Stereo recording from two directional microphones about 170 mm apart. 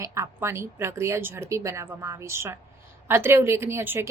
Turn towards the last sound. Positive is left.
turn(degrees=-15)  # may be behind; listen again after turning